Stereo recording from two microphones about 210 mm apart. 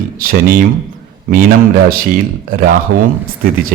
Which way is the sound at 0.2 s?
45° right (ahead or behind).